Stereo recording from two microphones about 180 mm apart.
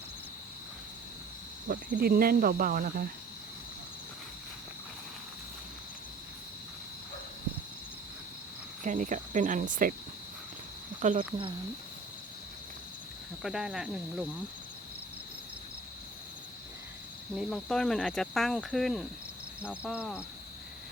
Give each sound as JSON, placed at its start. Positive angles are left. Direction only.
{"t": 1.6, "sound": "speech", "side_deg": -50}
{"t": 8.8, "sound": "speech", "side_deg": -45}
{"t": 11.0, "sound": "speech", "side_deg": -45}
{"t": 13.4, "sound": "speech", "side_deg": 0}
{"t": 17.3, "sound": "speech", "side_deg": 0}